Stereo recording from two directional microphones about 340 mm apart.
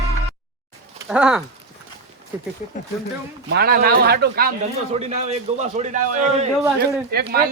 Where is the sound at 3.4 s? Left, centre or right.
Right.